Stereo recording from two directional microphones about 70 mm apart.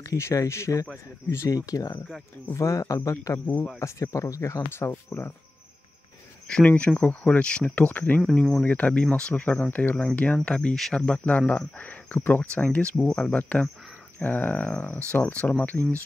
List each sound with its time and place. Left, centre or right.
0.0 s speech: left
1.5 s speech: left
6.4 s speech: centre
13.0 s speech: centre
13.4 s speech: centre